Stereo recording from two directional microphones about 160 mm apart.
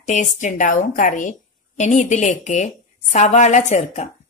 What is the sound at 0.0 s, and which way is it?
A woman's voice, 50° left (ahead or behind).